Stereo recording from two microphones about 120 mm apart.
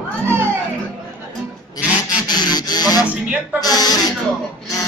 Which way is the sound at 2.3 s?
35° left (ahead or behind).